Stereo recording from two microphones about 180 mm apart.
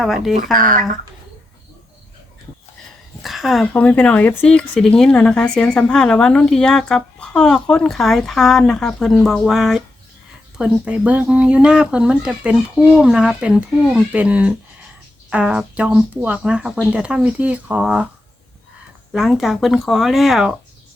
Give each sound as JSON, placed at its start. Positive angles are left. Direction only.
{"t": 0.0, "sound": "speech", "side_deg": 0}
{"t": 0.5, "sound": "speech", "side_deg": -50}
{"t": 3.2, "sound": "speech", "side_deg": 0}
{"t": 19.1, "sound": "speech", "side_deg": 0}